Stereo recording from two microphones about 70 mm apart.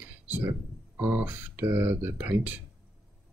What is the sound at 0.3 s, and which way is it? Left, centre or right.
Speech, right.